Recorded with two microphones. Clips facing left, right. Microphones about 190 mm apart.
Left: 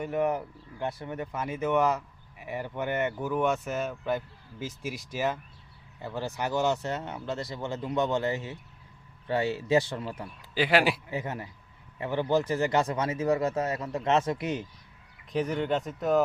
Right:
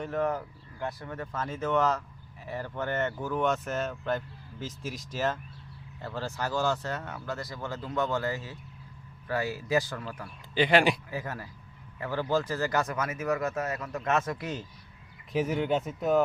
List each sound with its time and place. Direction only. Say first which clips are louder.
0.0 s speech: left 2 dB; 15° left (ahead or behind)
10.5 s speech: right 1 dB; 5° left (ahead or behind)
11.1 s speech: left 2 dB; 20° left (ahead or behind)
15.3 s speech: even; 5° right (ahead or behind)